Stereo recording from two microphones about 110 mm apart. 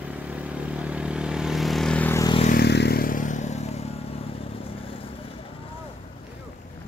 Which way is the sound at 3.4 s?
90° left.